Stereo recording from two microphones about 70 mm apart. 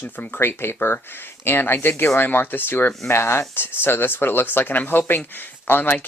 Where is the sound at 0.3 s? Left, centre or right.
Left.